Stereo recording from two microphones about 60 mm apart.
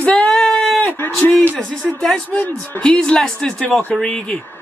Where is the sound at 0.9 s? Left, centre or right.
Left.